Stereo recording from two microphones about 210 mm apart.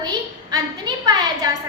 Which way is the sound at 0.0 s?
20° right (ahead or behind).